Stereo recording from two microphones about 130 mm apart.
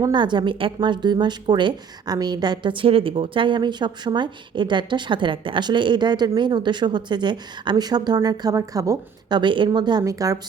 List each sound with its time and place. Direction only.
0.0 s a woman's voice: 35° right (ahead or behind)